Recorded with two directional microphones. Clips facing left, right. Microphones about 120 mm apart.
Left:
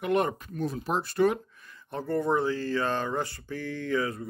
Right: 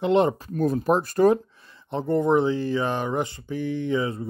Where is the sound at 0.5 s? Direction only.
45° right (ahead or behind).